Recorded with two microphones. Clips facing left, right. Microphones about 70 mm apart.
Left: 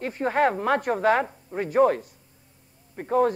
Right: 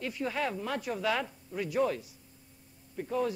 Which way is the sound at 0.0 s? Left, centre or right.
Left.